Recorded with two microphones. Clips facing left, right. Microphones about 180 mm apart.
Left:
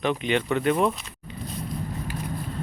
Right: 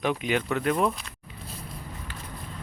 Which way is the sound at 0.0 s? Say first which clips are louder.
Left 2 dB; 5° right (ahead or behind).